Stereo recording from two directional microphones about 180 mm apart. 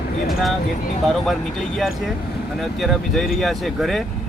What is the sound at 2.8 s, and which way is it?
Speech, centre (ahead or behind).